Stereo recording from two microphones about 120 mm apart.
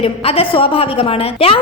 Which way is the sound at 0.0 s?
50° left (ahead or behind).